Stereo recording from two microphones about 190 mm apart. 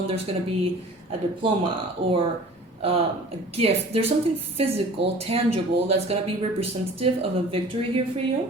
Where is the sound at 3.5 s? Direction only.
30° right (ahead or behind).